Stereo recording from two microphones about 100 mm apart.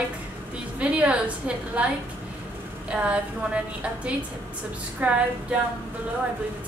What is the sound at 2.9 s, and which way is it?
A woman's voice, 10° right (ahead or behind).